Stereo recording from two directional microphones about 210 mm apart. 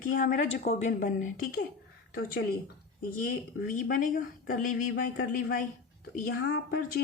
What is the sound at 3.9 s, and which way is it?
Speech, 40° left (ahead or behind).